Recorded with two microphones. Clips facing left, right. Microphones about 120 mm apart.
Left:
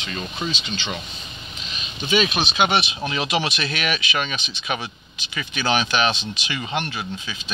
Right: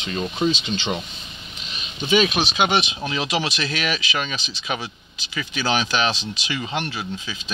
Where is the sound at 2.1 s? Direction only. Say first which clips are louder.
Right 2 dB; 15° right (ahead or behind).